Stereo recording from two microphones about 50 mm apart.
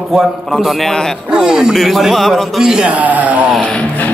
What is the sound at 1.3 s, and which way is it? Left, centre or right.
Speech, centre.